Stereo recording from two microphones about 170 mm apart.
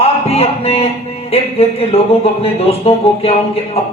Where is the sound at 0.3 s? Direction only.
35° left (ahead or behind).